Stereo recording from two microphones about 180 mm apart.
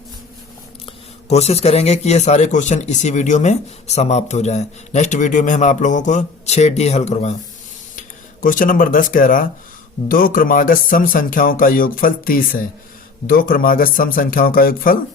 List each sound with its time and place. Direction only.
0.9 s speech: 35° left (ahead or behind); by 14.9 s 50° left (ahead or behind)